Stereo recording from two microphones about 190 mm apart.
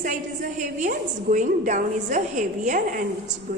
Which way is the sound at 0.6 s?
45° right (ahead or behind).